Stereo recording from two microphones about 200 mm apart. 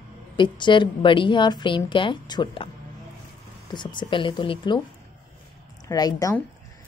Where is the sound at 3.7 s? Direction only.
20° left (ahead or behind).